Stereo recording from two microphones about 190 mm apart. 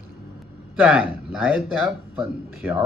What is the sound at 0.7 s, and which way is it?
Speech, 5° right (ahead or behind).